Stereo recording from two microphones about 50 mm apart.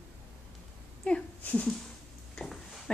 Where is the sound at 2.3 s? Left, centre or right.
Centre.